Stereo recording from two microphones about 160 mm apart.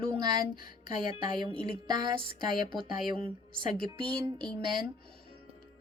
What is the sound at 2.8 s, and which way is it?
Speech, 30° right (ahead or behind).